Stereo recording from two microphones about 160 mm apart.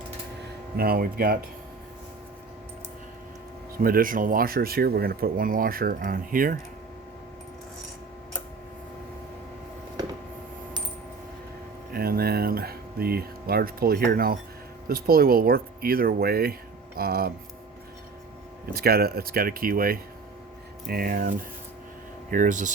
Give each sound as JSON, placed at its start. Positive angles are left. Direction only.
{"t": 0.8, "sound": "speech", "side_deg": -70}
{"t": 3.8, "sound": "speech", "side_deg": -60}
{"t": 11.9, "sound": "speech", "side_deg": -70}
{"t": 18.6, "sound": "speech", "side_deg": -75}